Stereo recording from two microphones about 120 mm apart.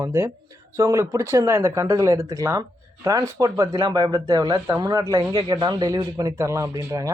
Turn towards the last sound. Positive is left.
turn(degrees=-30)  # may be behind; listen again after turning